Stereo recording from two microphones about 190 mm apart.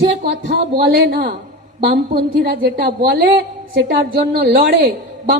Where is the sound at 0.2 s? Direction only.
60° right (ahead or behind).